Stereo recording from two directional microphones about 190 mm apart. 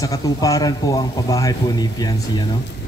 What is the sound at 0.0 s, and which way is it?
A man's voice, 20° left (ahead or behind).